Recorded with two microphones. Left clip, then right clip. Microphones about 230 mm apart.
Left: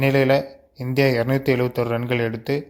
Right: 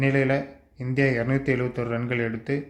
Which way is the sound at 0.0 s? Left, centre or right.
Left.